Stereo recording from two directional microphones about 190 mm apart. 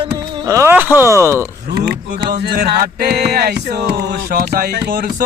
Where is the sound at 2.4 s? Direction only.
55° right (ahead or behind).